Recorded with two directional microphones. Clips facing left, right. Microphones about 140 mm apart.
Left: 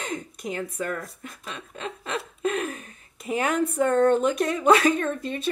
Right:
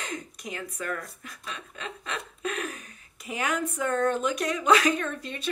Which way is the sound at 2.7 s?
30° left (ahead or behind).